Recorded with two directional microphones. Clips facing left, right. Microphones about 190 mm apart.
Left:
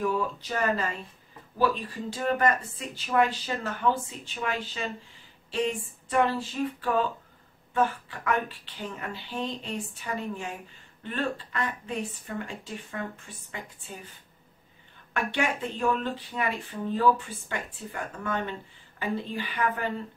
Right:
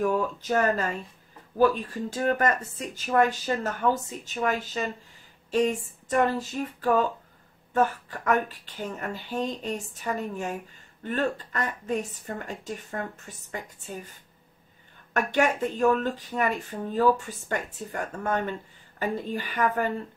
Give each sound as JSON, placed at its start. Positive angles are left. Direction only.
{"t": 0.0, "sound": "speech", "side_deg": -45}
{"t": 15.1, "sound": "speech", "side_deg": -45}